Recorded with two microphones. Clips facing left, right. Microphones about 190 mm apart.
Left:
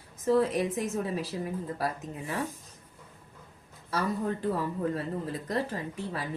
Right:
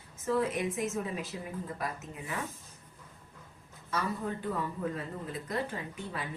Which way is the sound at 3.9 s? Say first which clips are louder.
Left 4 dB; 35° left (ahead or behind).